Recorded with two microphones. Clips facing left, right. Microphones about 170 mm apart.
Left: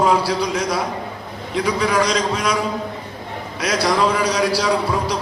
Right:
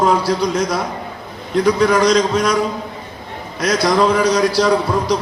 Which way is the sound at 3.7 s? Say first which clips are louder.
Right 3 dB; 30° left (ahead or behind).